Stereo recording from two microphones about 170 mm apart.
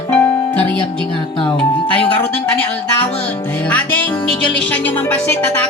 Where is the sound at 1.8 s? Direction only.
10° left (ahead or behind).